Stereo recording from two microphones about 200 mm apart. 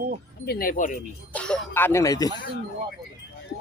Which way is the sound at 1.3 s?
5° left (ahead or behind).